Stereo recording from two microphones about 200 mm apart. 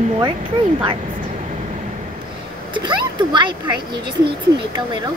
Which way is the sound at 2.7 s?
20° right (ahead or behind).